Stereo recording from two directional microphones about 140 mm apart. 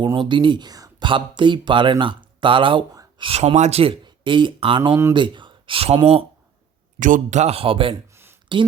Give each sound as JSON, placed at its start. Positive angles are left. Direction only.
{"t": 0.0, "sound": "speech", "side_deg": -35}
{"t": 2.9, "sound": "a sound", "side_deg": -25}
{"t": 3.2, "sound": "speech", "side_deg": -50}
{"t": 4.8, "sound": "speech", "side_deg": -25}
{"t": 5.1, "sound": "speech", "side_deg": -35}
{"t": 7.0, "sound": "speech", "side_deg": -60}
{"t": 8.1, "sound": "a sound", "side_deg": -15}